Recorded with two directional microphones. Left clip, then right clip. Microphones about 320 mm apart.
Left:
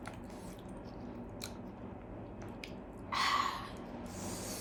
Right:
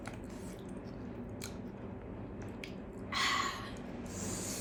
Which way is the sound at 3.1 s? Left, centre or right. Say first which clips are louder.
Left 1 dB; centre.